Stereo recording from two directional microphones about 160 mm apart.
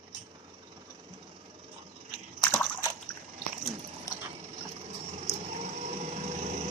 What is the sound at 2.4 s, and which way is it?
Splash, 10° left (ahead or behind).